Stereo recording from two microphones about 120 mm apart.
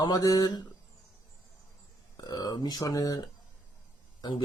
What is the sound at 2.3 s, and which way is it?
Speech, 35° left (ahead or behind).